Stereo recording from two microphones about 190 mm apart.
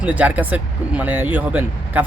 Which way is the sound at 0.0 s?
5° right (ahead or behind).